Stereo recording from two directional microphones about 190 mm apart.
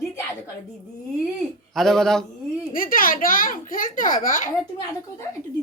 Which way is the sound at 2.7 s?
50° left (ahead or behind).